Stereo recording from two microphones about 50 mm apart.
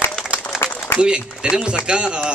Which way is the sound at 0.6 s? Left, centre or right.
Left.